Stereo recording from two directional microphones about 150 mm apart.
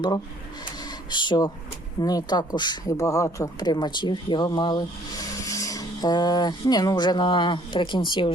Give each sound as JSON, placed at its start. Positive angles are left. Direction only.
{"t": 1.1, "sound": "speech", "side_deg": 30}